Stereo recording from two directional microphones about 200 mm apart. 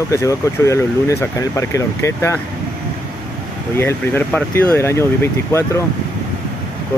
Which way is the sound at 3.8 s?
10° left (ahead or behind).